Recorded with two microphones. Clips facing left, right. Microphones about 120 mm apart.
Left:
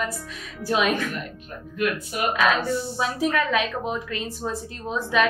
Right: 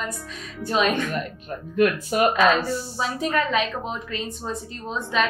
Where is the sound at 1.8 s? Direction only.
40° right (ahead or behind).